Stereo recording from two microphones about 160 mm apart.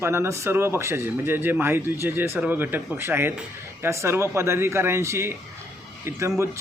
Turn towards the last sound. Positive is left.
turn(degrees=-15)  # may be behind; listen again after turning